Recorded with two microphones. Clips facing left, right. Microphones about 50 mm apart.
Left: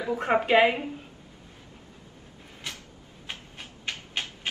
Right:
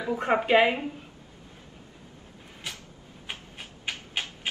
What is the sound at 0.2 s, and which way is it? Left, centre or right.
Speech, centre.